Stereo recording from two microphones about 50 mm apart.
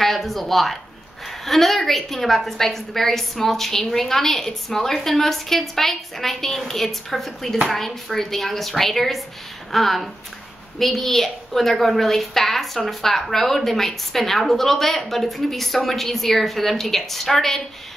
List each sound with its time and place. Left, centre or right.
0.0 s a woman's voice: centre